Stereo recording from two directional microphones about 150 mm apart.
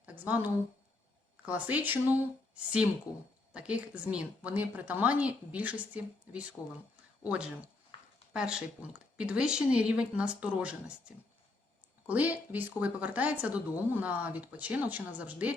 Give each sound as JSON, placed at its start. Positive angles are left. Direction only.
{"t": 0.0, "sound": "speech", "side_deg": -10}
{"t": 3.5, "sound": "speech", "side_deg": -10}
{"t": 7.9, "sound": "a sound", "side_deg": 35}
{"t": 8.3, "sound": "speech", "side_deg": -5}